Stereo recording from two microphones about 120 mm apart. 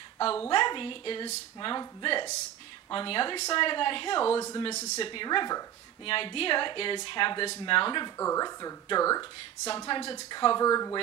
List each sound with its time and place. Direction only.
0.5 s a woman's voice: 40° left (ahead or behind)
4.3 s speech: 25° left (ahead or behind)
4.6 s speech: 65° left (ahead or behind)
5.0 s speech: 40° left (ahead or behind)
6.0 s a woman's voice: 50° left (ahead or behind)
8.2 s speech: 30° left (ahead or behind)
9.8 s speech: 40° left (ahead or behind)